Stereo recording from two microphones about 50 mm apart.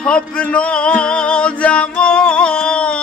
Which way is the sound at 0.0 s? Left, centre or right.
Left.